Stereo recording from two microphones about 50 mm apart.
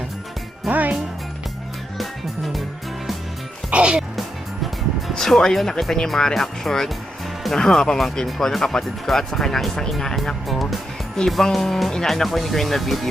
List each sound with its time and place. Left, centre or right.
0.7 s speech: right
2.0 s music: centre
3.7 s music: right
5.1 s speech: centre